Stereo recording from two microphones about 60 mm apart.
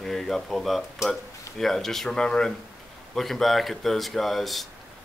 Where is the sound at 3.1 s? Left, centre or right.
Centre.